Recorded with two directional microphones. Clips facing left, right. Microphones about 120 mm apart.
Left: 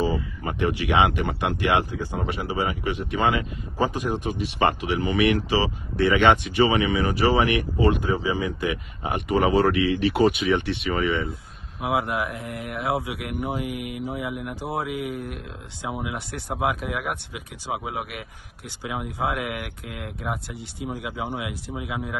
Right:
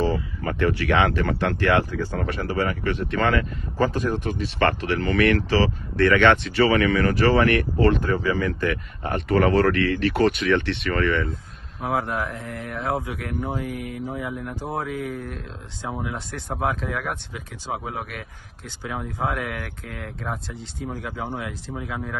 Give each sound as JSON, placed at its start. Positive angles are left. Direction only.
{"t": 0.5, "sound": "speech", "side_deg": 15}